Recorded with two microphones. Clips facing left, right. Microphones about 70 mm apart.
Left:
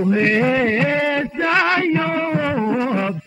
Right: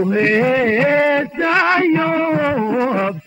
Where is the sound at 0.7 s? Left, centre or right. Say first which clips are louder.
Right 4 dB; right.